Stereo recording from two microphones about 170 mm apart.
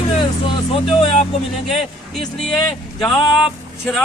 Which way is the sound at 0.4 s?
30° left (ahead or behind).